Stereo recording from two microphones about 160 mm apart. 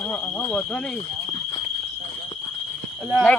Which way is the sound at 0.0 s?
10° left (ahead or behind).